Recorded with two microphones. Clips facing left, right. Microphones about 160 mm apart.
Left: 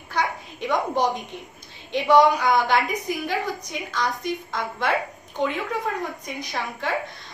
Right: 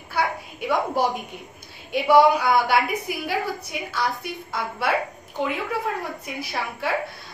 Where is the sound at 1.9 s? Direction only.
10° right (ahead or behind).